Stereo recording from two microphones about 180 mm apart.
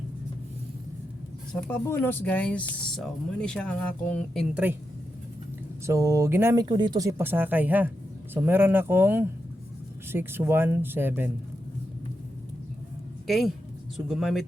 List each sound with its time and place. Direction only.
1.6 s speech: 10° left (ahead or behind)
4.5 s speech: 10° right (ahead or behind)
5.8 s speech: 15° right (ahead or behind)
6.7 s speech: 25° right (ahead or behind)
13.2 s speech: centre (ahead or behind)